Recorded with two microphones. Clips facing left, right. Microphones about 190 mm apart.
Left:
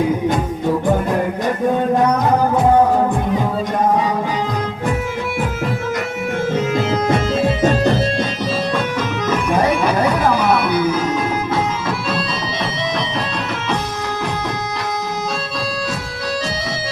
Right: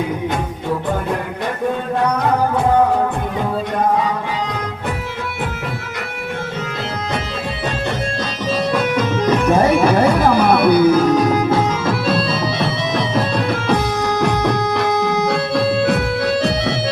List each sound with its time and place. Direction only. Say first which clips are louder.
7.1 s music: left 7 dB; 45° left (ahead or behind)
9.2 s music: right 3 dB; 30° right (ahead or behind)
14.2 s music: right 7 dB; 60° right (ahead or behind)